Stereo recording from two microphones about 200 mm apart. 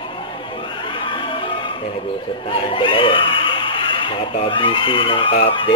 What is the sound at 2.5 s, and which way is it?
Speech, 25° left (ahead or behind).